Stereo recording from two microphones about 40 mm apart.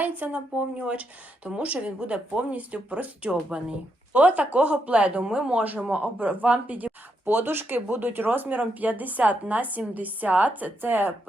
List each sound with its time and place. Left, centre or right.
0.0 s speech: right
3.2 s speech: right
4.1 s speech: right
5.2 s speech: right
5.5 s speech: right
7.3 s speech: right
10.8 s speech: right